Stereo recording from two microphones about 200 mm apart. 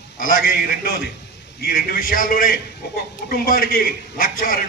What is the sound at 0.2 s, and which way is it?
A man's voice, 45° left (ahead or behind).